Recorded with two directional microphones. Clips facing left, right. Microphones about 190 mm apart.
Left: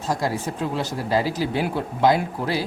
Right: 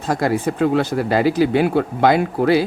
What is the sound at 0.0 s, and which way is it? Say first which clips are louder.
Speech: right 6 dB; 60° right (ahead or behind).